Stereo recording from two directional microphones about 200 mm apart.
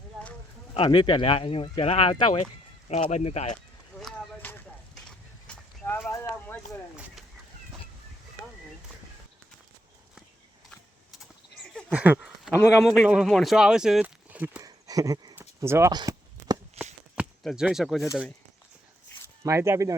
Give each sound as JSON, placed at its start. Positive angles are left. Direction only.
{"t": 0.7, "sound": "speech", "side_deg": 25}
{"t": 3.9, "sound": "a sound", "side_deg": 5}
{"t": 6.9, "sound": "speech", "side_deg": -5}
{"t": 11.2, "sound": "horse", "side_deg": 5}
{"t": 11.9, "sound": "a sound", "side_deg": -10}
{"t": 12.8, "sound": "speech", "side_deg": 0}
{"t": 16.8, "sound": "a sound", "side_deg": -30}
{"t": 17.2, "sound": "speech", "side_deg": -5}
{"t": 19.5, "sound": "speech", "side_deg": -15}